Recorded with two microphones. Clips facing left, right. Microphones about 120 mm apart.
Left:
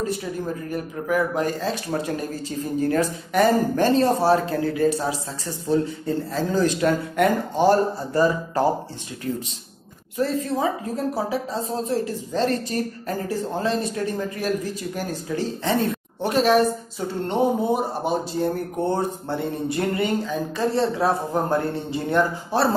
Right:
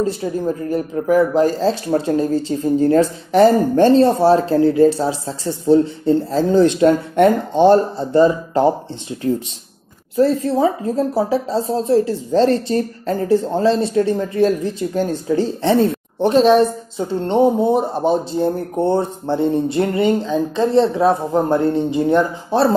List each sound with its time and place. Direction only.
0.0 s speech: 30° right (ahead or behind)